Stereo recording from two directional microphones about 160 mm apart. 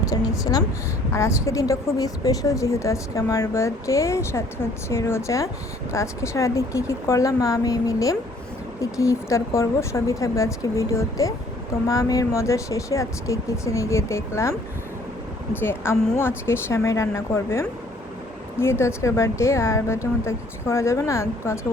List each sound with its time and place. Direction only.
0.0 s a woman's voice: 20° left (ahead or behind)
15.6 s speech: 15° left (ahead or behind)